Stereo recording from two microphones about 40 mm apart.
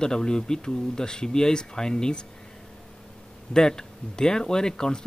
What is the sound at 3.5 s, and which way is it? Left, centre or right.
Speech, centre.